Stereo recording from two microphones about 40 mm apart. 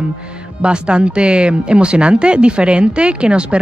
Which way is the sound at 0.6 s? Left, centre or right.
Right.